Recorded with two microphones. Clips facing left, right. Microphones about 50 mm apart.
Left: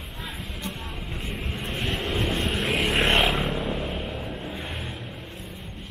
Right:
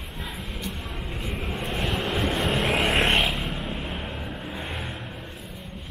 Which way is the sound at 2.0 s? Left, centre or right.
Right.